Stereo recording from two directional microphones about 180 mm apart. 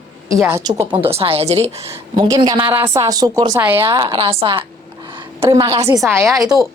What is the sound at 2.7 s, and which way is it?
A woman's voice, 15° right (ahead or behind).